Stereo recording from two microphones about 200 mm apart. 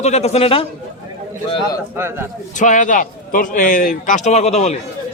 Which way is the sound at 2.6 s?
40° left (ahead or behind).